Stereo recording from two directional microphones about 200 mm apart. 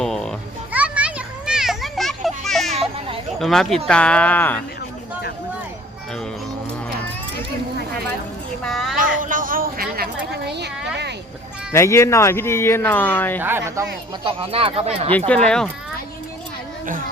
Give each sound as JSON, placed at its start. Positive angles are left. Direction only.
{"t": 0.0, "sound": "children playing", "side_deg": 0}
{"t": 3.3, "sound": "speech", "side_deg": 0}
{"t": 8.6, "sound": "a sound", "side_deg": 0}
{"t": 9.0, "sound": "a sound", "side_deg": -40}
{"t": 11.7, "sound": "speech", "side_deg": 15}
{"t": 13.4, "sound": "speech", "side_deg": -10}
{"t": 14.3, "sound": "speech", "side_deg": -25}
{"t": 15.4, "sound": "speech", "side_deg": 5}